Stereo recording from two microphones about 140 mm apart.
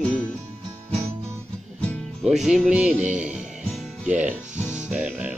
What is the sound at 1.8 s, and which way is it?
Music, centre (ahead or behind).